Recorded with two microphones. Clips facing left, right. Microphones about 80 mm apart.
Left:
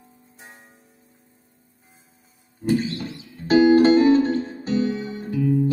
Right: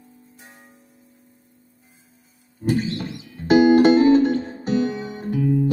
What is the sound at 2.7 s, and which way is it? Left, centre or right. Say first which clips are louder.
Music: left 1 dB; right.